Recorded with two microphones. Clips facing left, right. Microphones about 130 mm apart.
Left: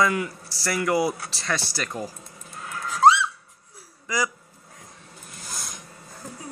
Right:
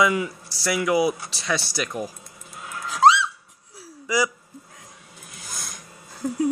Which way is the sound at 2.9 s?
90° right.